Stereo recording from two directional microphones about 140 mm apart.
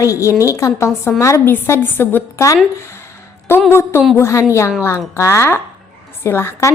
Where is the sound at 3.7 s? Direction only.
15° left (ahead or behind).